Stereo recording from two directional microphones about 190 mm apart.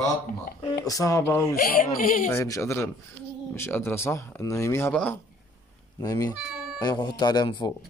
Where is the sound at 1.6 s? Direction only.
50° left (ahead or behind).